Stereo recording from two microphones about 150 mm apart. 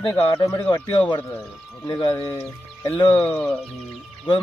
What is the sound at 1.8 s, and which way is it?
Speech, 25° left (ahead or behind).